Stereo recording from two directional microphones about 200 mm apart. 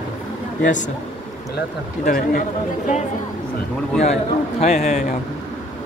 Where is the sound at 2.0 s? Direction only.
45° left (ahead or behind).